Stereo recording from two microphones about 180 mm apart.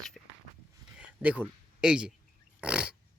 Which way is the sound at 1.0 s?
5° right (ahead or behind).